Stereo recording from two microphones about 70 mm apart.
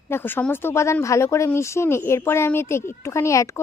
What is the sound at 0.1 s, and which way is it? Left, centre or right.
Speech, left.